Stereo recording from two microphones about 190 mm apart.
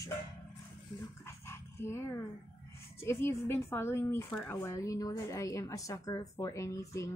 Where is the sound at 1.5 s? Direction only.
15° left (ahead or behind).